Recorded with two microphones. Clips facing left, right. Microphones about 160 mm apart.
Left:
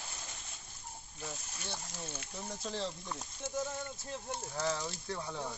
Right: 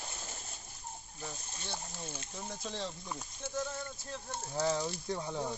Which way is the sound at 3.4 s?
15° left (ahead or behind).